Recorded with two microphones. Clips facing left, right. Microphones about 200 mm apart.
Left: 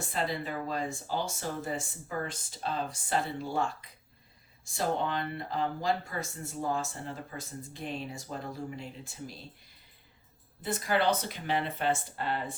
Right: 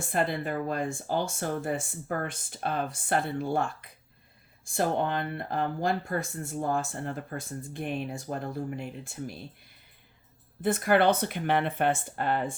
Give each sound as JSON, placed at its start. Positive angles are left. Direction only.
{"t": 0.1, "sound": "speech", "side_deg": -55}
{"t": 10.6, "sound": "speech", "side_deg": -55}